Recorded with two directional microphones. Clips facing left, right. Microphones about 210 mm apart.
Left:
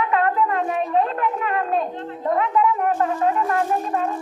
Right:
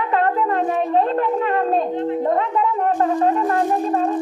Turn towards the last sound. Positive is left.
turn(degrees=-35)  # may be behind; listen again after turning